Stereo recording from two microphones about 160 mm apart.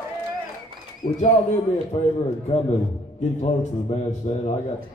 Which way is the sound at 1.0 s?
60° left (ahead or behind).